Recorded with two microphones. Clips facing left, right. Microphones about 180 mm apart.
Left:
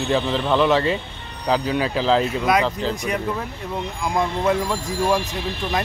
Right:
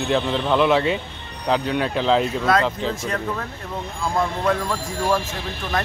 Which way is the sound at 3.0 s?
15° left (ahead or behind).